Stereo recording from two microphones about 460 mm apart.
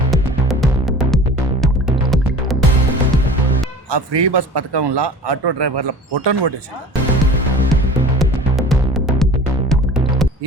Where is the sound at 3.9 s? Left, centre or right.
Right.